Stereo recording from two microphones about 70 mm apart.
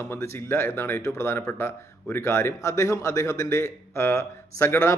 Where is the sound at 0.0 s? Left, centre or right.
Left.